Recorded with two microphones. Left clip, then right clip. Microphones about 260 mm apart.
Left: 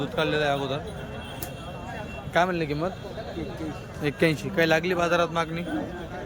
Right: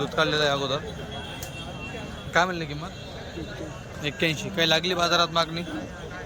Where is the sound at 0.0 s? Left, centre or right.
Centre.